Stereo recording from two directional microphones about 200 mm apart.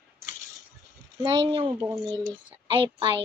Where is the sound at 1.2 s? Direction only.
25° right (ahead or behind).